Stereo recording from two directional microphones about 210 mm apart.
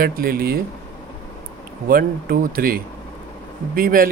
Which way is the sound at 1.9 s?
45° right (ahead or behind).